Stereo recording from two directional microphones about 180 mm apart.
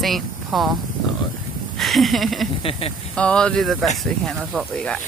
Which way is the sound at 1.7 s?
Centre (ahead or behind).